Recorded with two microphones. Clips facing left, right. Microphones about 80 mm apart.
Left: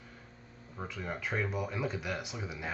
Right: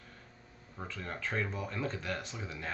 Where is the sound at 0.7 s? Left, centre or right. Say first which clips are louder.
Left 2 dB; centre.